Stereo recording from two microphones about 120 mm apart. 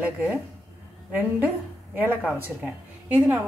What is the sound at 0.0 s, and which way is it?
Speech, 10° right (ahead or behind).